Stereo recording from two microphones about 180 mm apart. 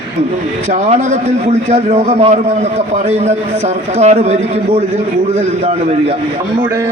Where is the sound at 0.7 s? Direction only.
40° right (ahead or behind).